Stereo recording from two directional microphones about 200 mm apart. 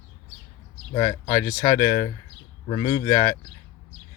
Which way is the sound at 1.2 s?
10° left (ahead or behind).